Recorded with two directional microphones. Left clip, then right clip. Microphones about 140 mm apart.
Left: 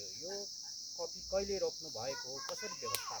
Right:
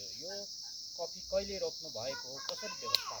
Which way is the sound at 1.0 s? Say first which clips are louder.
Right 2 dB; 20° left (ahead or behind).